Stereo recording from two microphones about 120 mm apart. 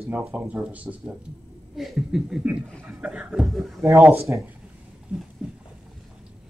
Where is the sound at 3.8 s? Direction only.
25° right (ahead or behind).